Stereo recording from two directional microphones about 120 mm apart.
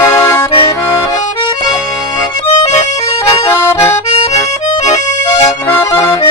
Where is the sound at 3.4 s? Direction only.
20° left (ahead or behind).